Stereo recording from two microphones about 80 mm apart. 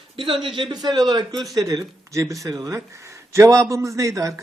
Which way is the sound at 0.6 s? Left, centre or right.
Right.